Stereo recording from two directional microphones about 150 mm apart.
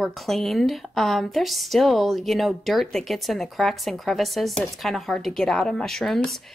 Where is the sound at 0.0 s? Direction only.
Centre (ahead or behind).